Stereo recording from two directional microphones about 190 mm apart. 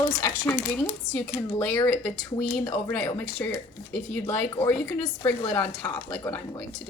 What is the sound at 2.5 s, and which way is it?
Speech, 5° left (ahead or behind).